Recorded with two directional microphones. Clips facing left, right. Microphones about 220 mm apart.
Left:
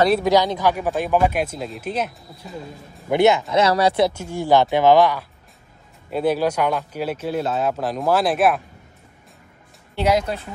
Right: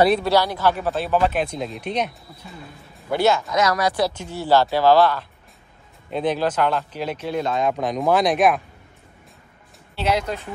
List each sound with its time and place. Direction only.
0.2 s speech: 15° left (ahead or behind)
3.1 s speech: 20° left (ahead or behind)
4.1 s speech: 10° left (ahead or behind)
9.9 s speech: 10° left (ahead or behind)